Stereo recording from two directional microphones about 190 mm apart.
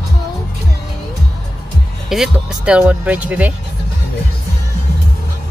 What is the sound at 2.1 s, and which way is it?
Speech, 5° right (ahead or behind).